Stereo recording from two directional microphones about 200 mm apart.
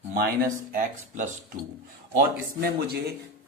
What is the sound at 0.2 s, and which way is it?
Speech, 40° right (ahead or behind).